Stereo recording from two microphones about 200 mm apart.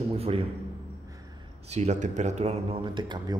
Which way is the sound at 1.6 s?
35° right (ahead or behind).